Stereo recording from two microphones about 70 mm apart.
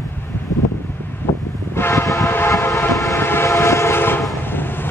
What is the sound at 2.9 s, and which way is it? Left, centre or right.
Train, left.